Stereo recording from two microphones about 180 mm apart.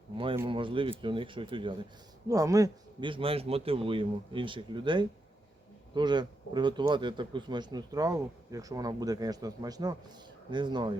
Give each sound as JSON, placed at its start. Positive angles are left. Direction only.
{"t": 0.4, "sound": "speech", "side_deg": -30}